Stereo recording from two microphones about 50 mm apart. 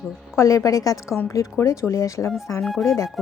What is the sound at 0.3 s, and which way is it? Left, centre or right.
A woman's voice, left.